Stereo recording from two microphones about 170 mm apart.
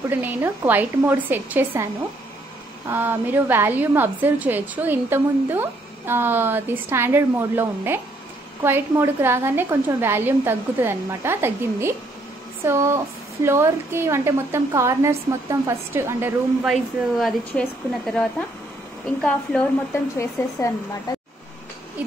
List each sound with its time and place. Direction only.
0.1 s a woman's voice: 10° right (ahead or behind)
2.9 s a woman's voice: 10° right (ahead or behind)
16.7 s a woman's voice: centre (ahead or behind); by 20.7 s 15° left (ahead or behind)
21.1 s a sound: 25° left (ahead or behind)